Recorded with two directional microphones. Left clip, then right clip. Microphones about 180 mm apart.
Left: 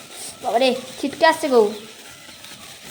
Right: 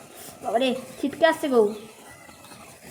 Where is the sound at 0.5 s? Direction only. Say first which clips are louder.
Left 5 dB; 15° right (ahead or behind).